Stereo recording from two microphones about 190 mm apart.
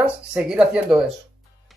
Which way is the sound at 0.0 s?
5° right (ahead or behind).